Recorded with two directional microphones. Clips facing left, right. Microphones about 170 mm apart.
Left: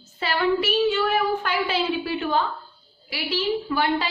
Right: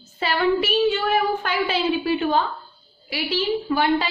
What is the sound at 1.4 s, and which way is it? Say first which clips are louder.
A woman's voice: right 2 dB; 20° right (ahead or behind).